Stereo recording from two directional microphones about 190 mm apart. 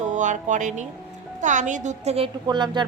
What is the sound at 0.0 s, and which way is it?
A woman's voice, 40° right (ahead or behind).